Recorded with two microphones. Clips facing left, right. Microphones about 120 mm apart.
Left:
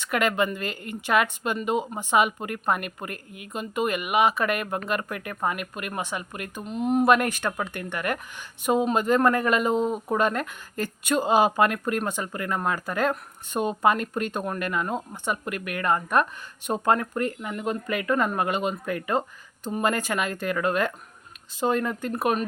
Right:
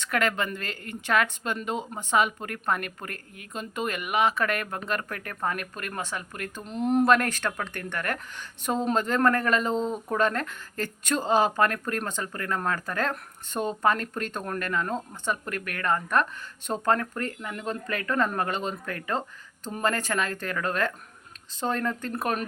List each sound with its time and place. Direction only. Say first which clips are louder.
0.0 s speech: left 3 dB; 15° left (ahead or behind)